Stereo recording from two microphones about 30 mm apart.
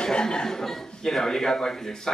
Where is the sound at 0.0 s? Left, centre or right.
Left.